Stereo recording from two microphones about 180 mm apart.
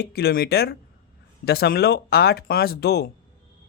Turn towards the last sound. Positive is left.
turn(degrees=60)  # may be behind; listen again after turning